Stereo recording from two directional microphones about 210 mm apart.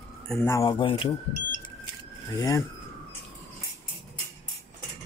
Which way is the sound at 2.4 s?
15° left (ahead or behind).